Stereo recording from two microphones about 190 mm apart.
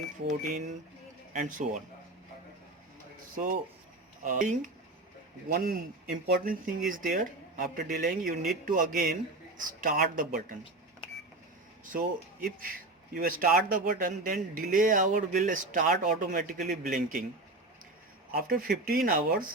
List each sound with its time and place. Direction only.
0.3 s speech: 40° right (ahead or behind)
3.3 s speech: 45° right (ahead or behind)
11.9 s speech: 45° right (ahead or behind)
18.3 s speech: 50° right (ahead or behind)